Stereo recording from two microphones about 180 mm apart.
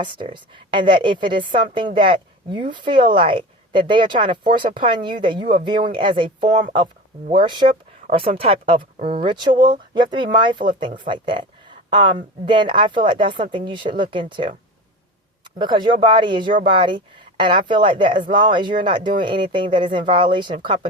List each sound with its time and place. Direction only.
0.0 s a woman's voice: 25° right (ahead or behind)